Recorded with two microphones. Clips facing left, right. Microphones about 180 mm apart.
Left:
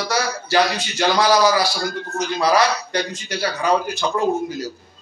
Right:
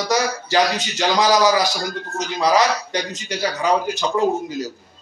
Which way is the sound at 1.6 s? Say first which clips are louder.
Even; 45° right (ahead or behind).